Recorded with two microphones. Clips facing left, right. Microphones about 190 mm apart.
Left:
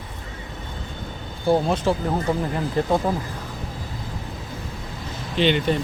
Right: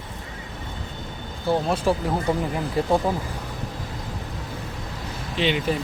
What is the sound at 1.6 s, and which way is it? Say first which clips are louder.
Speech: left 1 dB; 10° right (ahead or behind).